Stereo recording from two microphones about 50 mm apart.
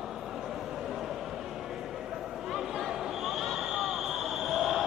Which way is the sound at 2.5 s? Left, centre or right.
Centre.